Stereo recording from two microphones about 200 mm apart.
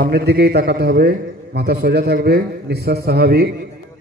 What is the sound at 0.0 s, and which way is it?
A man's voice, 55° right (ahead or behind).